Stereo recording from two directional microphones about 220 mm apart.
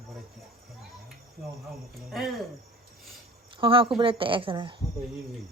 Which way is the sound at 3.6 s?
25° right (ahead or behind).